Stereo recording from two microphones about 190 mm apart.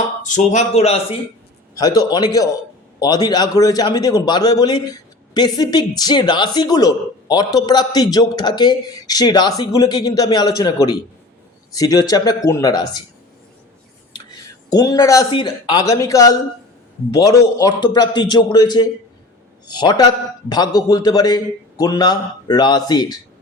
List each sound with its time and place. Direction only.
0.2 s speech: 40° left (ahead or behind)
1.7 s a man's voice: 20° left (ahead or behind)
14.7 s a man's voice: 20° left (ahead or behind)